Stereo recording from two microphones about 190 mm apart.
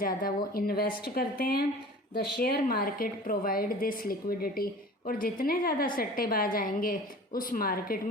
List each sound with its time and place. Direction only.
0.0 s a woman's voice: 50° left (ahead or behind)